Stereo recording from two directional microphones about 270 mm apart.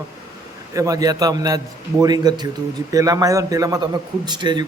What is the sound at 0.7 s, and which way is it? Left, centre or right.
A man's voice, centre.